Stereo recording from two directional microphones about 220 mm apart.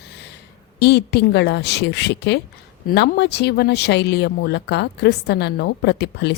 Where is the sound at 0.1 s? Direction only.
50° left (ahead or behind).